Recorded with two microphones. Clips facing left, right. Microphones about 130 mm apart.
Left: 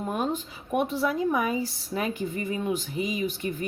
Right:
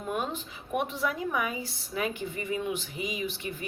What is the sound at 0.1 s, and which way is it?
A woman's voice, 40° left (ahead or behind).